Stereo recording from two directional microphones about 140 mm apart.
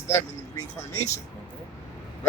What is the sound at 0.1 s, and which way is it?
Speech, 15° left (ahead or behind).